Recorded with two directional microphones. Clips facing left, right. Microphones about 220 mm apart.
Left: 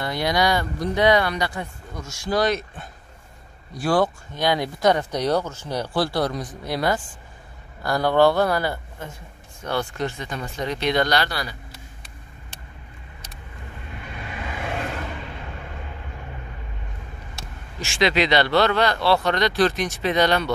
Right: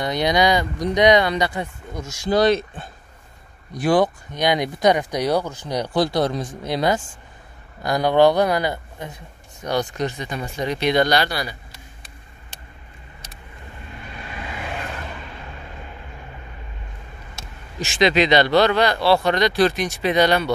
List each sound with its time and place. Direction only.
0.0 s speech: 20° right (ahead or behind)
17.7 s speech: 20° right (ahead or behind)